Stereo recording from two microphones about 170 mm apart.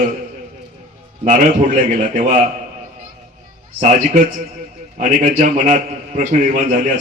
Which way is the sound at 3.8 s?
45° right (ahead or behind).